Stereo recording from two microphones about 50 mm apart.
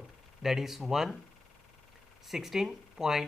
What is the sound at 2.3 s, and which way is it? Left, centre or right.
Speech, centre.